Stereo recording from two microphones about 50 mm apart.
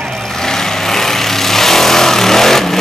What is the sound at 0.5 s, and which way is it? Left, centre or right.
Vehicle, centre.